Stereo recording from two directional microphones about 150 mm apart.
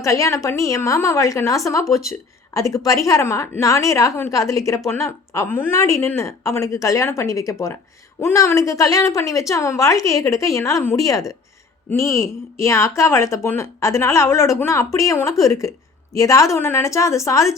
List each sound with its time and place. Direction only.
0.0 s a woman's voice: 20° left (ahead or behind)